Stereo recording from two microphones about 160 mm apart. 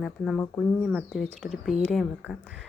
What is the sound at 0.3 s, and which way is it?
Speech, 15° left (ahead or behind).